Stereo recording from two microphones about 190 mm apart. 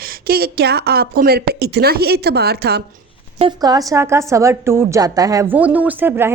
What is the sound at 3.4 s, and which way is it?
A woman's voice, 25° right (ahead or behind).